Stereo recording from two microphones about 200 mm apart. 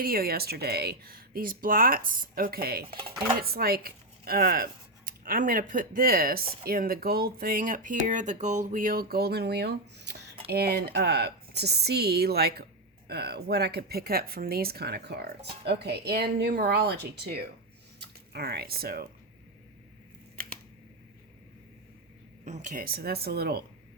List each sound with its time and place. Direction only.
0.0 s speech: 45° right (ahead or behind)
22.4 s speech: 40° right (ahead or behind)